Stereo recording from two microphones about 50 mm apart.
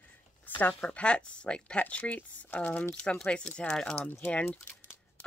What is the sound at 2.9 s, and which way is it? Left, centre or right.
A woman's voice, centre.